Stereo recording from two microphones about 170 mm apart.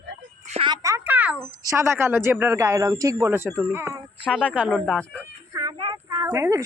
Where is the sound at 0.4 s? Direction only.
40° right (ahead or behind).